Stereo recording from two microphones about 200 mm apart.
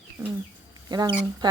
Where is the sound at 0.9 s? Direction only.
20° right (ahead or behind).